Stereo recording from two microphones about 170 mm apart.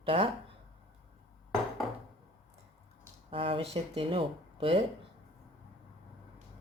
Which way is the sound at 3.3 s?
30° right (ahead or behind).